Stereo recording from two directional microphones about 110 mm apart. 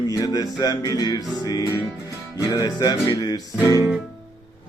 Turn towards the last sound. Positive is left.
turn(degrees=40)  # may be behind; listen again after turning